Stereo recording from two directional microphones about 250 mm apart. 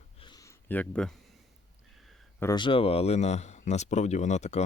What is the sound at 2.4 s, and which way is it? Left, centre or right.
Speech, centre.